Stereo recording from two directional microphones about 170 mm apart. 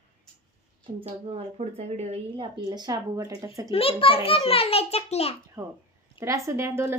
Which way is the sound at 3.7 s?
35° left (ahead or behind).